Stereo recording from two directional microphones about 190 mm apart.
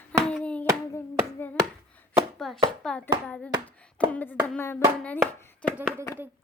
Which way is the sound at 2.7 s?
5° left (ahead or behind).